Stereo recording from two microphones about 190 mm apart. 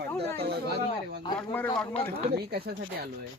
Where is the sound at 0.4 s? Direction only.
55° right (ahead or behind).